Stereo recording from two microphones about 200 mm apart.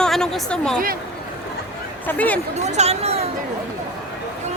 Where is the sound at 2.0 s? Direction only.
10° left (ahead or behind).